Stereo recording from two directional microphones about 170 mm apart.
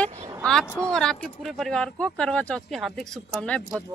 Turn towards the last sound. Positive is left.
turn(degrees=5)  # may be behind; listen again after turning